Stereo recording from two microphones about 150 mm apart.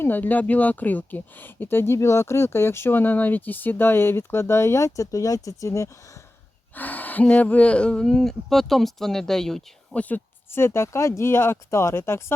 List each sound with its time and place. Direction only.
0.0 s speech: 10° left (ahead or behind)